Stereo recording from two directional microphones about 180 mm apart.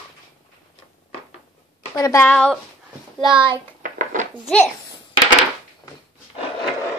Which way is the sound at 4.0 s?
45° right (ahead or behind).